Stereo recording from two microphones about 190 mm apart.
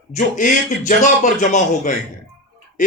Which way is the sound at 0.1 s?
45° left (ahead or behind).